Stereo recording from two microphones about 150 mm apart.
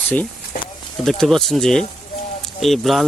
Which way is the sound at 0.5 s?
65° left (ahead or behind).